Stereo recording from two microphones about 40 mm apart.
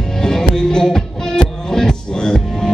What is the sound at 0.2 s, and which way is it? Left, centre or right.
Music, centre.